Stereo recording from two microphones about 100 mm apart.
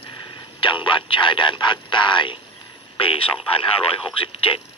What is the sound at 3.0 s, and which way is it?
Speech, 65° left (ahead or behind).